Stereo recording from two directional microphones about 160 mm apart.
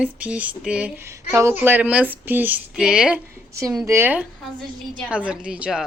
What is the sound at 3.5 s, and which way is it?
A woman's voice, 20° right (ahead or behind).